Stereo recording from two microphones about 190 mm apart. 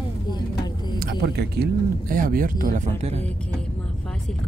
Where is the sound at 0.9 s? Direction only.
55° right (ahead or behind); by 3.2 s 35° right (ahead or behind).